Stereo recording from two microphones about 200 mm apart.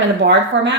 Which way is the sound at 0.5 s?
70° right (ahead or behind).